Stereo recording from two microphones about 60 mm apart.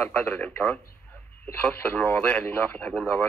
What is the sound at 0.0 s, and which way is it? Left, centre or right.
Speech, left.